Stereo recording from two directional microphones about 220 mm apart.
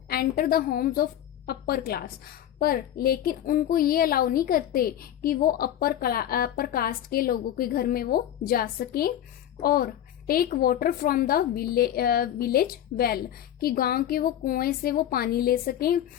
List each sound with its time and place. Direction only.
0.1 s a woman's voice: 45° left (ahead or behind)